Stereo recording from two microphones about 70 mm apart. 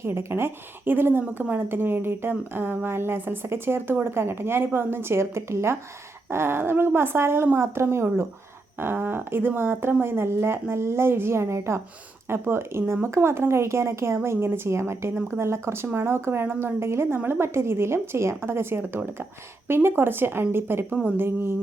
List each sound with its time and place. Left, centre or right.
0.0 s speech: right
20.9 s a woman's voice: right